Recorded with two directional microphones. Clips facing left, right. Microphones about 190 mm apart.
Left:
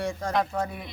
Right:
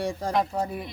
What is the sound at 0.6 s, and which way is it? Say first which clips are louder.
Speech: right 1 dB; 35° right (ahead or behind).